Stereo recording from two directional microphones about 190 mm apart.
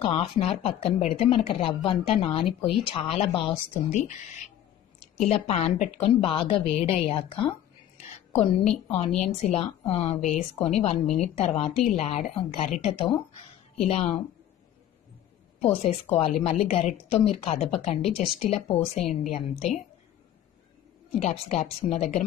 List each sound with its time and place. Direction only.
0.0 s a woman's voice: 30° left (ahead or behind)
15.6 s a woman's voice: 35° left (ahead or behind)
21.2 s a woman's voice: 35° left (ahead or behind)